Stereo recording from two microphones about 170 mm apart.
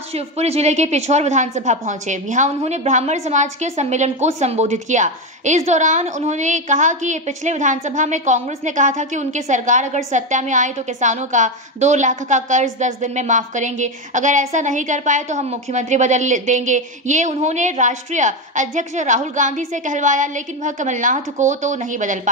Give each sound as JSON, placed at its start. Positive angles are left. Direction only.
{"t": 0.1, "sound": "a woman's voice", "side_deg": -40}